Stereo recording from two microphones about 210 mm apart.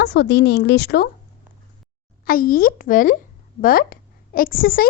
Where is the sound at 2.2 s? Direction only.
45° left (ahead or behind).